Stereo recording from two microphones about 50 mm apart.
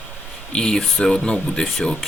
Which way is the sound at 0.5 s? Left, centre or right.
Centre.